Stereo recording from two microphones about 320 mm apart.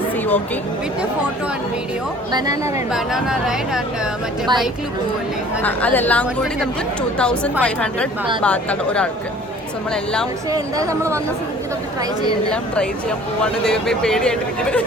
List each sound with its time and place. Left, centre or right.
2.3 s speech: centre
2.9 s speech: centre
5.6 s speech: centre
10.5 s speech: centre
12.5 s speech: centre